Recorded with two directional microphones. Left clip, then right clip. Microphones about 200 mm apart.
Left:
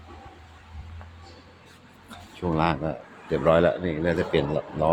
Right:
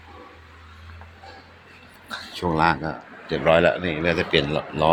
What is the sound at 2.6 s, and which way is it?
A man's voice, 20° left (ahead or behind).